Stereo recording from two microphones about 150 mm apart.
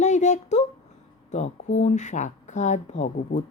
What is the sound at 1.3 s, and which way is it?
Speech, 50° left (ahead or behind).